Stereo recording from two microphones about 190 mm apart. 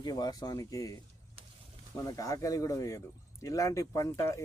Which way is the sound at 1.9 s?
20° left (ahead or behind).